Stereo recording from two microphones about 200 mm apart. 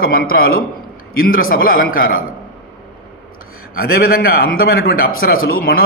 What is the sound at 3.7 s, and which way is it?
A man's voice, 50° left (ahead or behind).